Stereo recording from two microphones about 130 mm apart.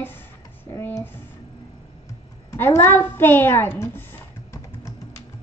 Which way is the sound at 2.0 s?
20° left (ahead or behind).